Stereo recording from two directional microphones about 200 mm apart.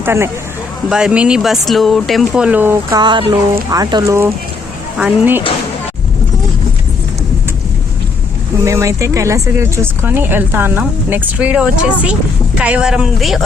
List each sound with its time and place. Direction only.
0.0 s speech: 10° right (ahead or behind)
3.0 s speech: 25° right (ahead or behind); by 5.4 s 10° right (ahead or behind)
8.6 s speech: 15° right (ahead or behind)